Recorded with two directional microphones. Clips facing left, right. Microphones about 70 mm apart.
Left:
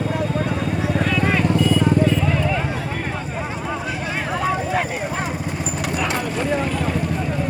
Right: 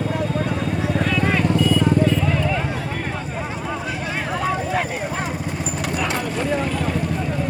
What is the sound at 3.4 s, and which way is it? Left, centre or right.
Clip-clop, centre.